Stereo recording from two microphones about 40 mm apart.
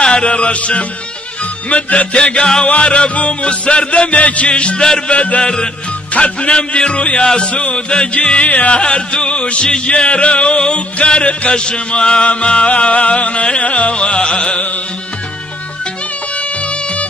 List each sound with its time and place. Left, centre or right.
0.0 s music: left
4.8 s music: centre
5.1 s music: left
5.4 s music: left
8.7 s music: left
16.3 s music: left